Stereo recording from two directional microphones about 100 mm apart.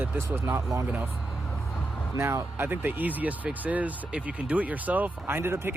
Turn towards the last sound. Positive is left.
turn(degrees=-25)  # may be behind; listen again after turning